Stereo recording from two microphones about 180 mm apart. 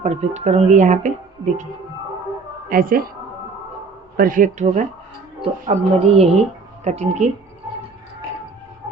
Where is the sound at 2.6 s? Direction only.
50° right (ahead or behind).